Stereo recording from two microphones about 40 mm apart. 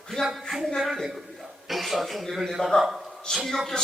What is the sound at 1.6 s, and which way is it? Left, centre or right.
A man's voice, centre.